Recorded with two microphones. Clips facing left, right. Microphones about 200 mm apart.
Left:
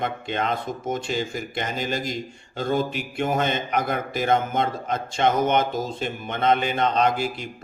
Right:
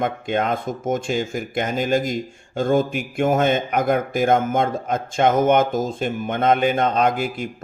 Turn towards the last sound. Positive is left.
turn(degrees=-50)  # may be behind; listen again after turning